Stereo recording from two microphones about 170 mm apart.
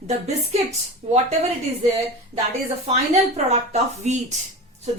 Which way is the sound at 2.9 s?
40° right (ahead or behind).